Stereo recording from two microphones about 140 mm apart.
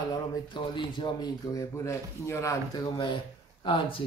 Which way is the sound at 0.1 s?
35° left (ahead or behind).